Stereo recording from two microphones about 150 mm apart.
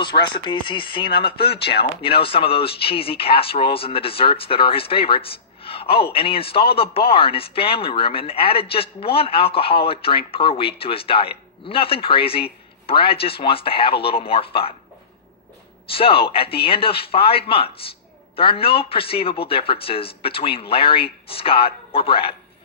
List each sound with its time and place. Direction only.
0.3 s a man's voice: 30° left (ahead or behind)
15.9 s speech: 40° left (ahead or behind)